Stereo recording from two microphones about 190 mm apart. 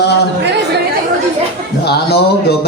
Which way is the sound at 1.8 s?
60° left (ahead or behind).